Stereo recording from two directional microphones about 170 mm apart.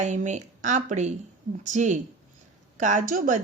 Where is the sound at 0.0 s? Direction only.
45° right (ahead or behind).